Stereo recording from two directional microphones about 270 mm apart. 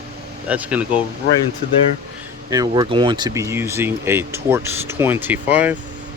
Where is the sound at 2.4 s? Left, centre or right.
Centre.